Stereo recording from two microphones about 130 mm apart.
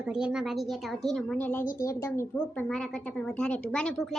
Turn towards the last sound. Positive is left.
turn(degrees=5)  # may be behind; listen again after turning